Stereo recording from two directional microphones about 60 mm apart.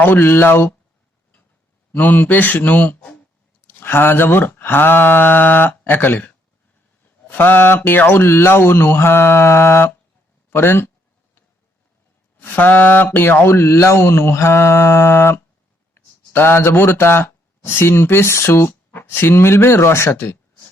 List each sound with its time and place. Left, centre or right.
0.0 s speech: left
1.9 s speech: left
12.4 s speech: left
16.0 s a sound: left
16.3 s speech: left